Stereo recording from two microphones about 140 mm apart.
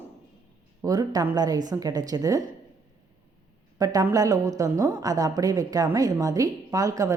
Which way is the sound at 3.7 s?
25° right (ahead or behind).